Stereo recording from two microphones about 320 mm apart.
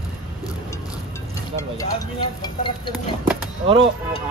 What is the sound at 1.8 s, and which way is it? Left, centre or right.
Speech, centre.